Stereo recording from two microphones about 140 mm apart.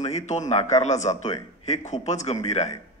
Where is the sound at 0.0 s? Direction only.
55° left (ahead or behind).